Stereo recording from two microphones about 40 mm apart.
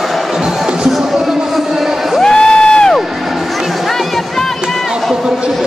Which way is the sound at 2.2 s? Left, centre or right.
Centre.